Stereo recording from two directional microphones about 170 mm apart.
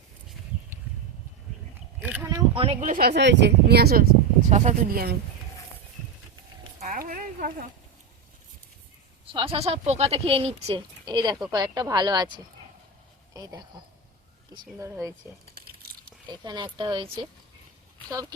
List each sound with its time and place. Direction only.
2.0 s a sound: 10° right (ahead or behind)
2.6 s speech: 35° right (ahead or behind)
2.9 s speech: 65° right (ahead or behind)
4.5 s speech: 40° right (ahead or behind)
4.9 s speech: 60° right (ahead or behind)
6.7 s speech: 50° right (ahead or behind)
9.3 s speech: 30° right (ahead or behind)
11.0 s speech: 25° right (ahead or behind)
13.3 s speech: 20° right (ahead or behind)
14.8 s speech: 15° right (ahead or behind)
15.5 s crumpling: 65° right (ahead or behind)
16.2 s speech: 25° right (ahead or behind)